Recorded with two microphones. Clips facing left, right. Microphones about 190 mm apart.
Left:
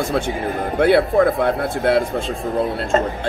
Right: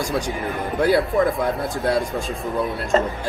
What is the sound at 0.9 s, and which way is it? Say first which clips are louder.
Speech: left 4 dB; 65° left (ahead or behind).